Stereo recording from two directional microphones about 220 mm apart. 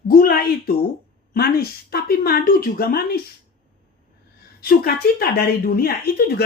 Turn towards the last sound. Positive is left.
turn(degrees=45)  # may be behind; listen again after turning